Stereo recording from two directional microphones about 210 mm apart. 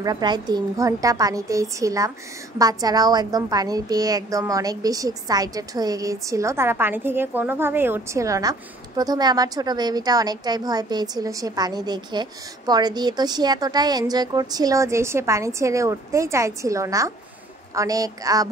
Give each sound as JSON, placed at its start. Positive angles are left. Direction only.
{"t": 0.0, "sound": "a woman's voice", "side_deg": -20}